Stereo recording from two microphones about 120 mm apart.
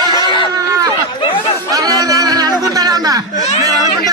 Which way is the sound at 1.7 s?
30° right (ahead or behind).